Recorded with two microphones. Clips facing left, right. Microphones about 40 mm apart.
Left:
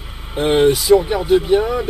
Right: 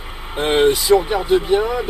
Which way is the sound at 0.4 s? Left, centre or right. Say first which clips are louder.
Left 2 dB; centre.